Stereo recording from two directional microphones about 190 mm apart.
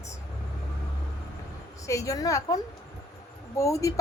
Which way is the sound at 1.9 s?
15° left (ahead or behind).